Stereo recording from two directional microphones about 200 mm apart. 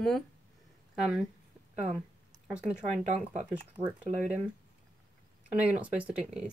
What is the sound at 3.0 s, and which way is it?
Speech, 35° right (ahead or behind).